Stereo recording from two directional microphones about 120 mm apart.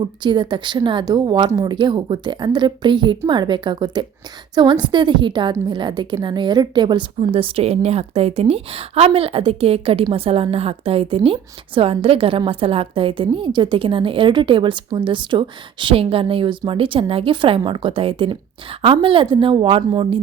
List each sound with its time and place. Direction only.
0.0 s a woman's voice: 40° right (ahead or behind)